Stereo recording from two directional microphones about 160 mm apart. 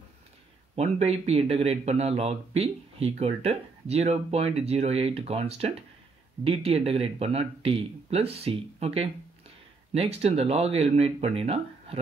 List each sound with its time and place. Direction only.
0.7 s speech: 40° right (ahead or behind)